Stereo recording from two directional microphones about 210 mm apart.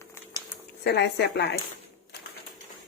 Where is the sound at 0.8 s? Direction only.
55° left (ahead or behind).